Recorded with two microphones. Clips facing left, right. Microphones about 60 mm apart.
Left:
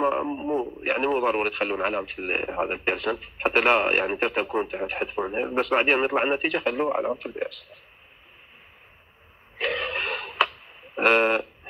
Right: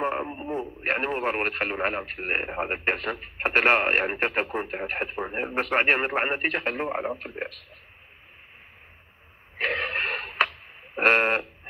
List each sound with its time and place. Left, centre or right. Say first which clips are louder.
0.0 s radio: left 4 dB; right
0.3 s radio: left 5 dB; centre
0.9 s speech: left 4 dB; right
9.6 s wheeze: even; right
11.0 s speech: left 1 dB; right